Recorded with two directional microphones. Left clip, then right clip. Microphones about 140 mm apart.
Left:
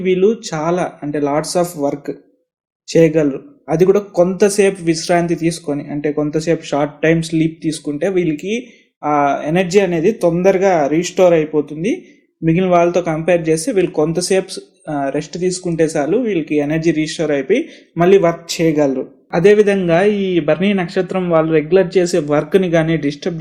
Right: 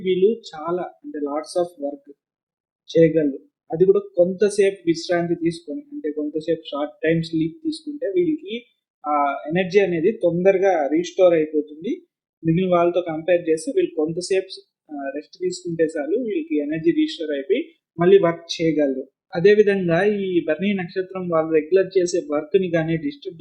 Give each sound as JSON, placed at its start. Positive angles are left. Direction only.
{"t": 0.0, "sound": "speech", "side_deg": 35}
{"t": 19.3, "sound": "a man's voice", "side_deg": 30}